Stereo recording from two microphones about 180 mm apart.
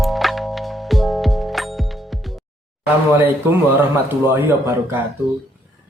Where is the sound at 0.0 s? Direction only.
Centre (ahead or behind).